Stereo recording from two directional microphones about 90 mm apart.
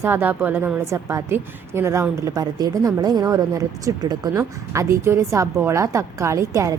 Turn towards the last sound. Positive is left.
turn(degrees=-35)  # may be behind; listen again after turning